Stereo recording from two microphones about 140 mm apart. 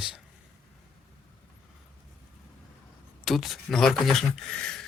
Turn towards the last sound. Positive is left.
turn(degrees=5)  # may be behind; listen again after turning